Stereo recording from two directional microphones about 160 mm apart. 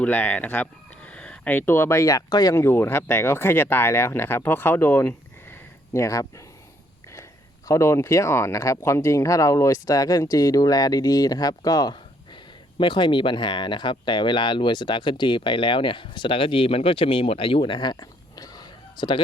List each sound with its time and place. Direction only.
0.0 s speech: 10° left (ahead or behind)
7.7 s speech: 20° left (ahead or behind)